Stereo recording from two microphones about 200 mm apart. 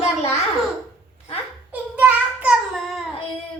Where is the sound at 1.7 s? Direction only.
10° right (ahead or behind).